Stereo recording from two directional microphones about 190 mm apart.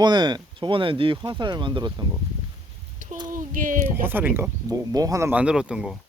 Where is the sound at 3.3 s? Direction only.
45° right (ahead or behind).